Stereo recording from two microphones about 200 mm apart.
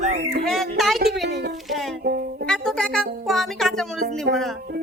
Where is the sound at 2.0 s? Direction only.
50° right (ahead or behind).